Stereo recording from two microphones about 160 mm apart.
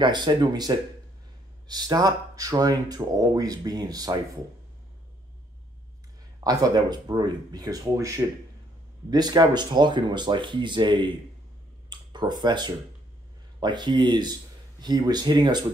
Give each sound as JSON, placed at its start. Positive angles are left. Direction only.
{"t": 0.0, "sound": "speech", "side_deg": -30}
{"t": 6.4, "sound": "speech", "side_deg": -20}
{"t": 9.1, "sound": "speech", "side_deg": -25}